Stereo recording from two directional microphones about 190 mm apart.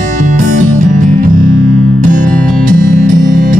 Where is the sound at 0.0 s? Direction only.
40° right (ahead or behind).